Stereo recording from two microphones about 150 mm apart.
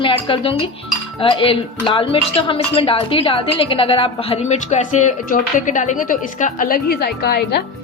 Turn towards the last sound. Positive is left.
turn(degrees=90)